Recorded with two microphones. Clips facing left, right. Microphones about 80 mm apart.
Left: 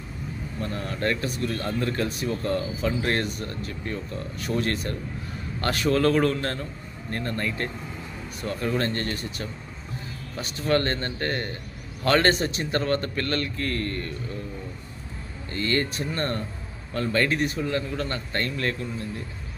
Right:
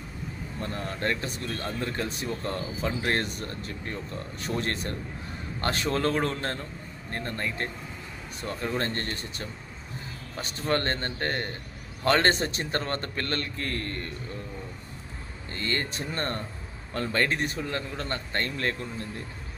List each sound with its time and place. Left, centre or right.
0.6 s a man's voice: right
15.5 s a man's voice: right